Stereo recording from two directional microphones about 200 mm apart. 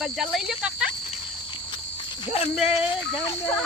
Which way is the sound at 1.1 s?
25° left (ahead or behind).